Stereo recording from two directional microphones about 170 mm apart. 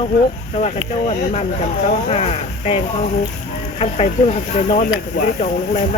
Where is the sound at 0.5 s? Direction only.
40° left (ahead or behind).